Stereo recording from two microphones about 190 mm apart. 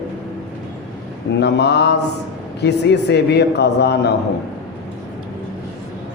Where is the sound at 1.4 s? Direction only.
65° left (ahead or behind).